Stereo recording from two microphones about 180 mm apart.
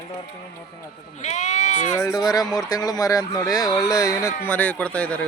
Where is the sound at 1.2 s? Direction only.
40° left (ahead or behind).